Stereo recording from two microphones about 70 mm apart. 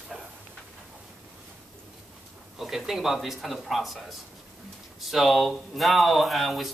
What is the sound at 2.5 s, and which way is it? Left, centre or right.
Speech, centre.